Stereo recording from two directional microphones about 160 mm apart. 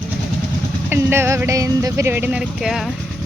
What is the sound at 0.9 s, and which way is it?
Speech, 15° right (ahead or behind).